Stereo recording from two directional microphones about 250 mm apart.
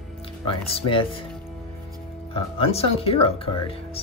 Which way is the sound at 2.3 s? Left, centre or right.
Left.